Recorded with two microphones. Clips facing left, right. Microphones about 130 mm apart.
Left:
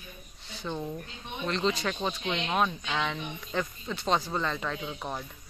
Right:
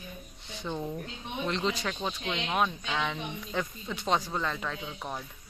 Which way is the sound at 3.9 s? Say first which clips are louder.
Left 1 dB; 15° right (ahead or behind).